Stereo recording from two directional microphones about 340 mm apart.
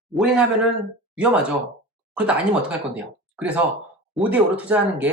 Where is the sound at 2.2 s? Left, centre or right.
Centre.